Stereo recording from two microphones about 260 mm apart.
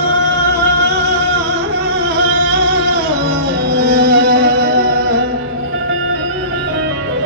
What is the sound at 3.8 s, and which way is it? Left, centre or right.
Music, right.